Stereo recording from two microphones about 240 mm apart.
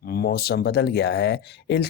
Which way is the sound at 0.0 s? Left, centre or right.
Left.